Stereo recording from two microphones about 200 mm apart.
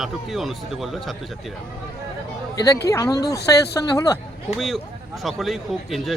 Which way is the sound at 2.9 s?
15° left (ahead or behind).